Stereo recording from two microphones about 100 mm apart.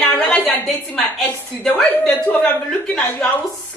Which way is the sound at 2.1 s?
20° left (ahead or behind).